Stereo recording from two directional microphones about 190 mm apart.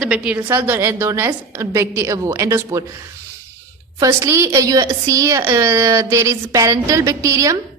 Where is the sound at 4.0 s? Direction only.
15° right (ahead or behind).